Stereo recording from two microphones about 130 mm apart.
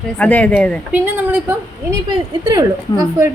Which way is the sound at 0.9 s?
15° right (ahead or behind).